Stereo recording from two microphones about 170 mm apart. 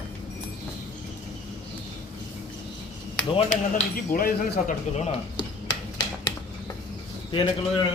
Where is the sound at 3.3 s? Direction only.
45° left (ahead or behind).